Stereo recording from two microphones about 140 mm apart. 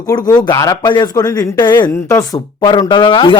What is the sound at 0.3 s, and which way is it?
A man's voice, 30° left (ahead or behind).